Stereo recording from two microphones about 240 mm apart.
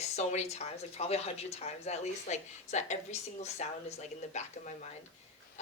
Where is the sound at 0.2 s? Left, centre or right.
Left.